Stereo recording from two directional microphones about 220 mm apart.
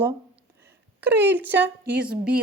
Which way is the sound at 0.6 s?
10° right (ahead or behind).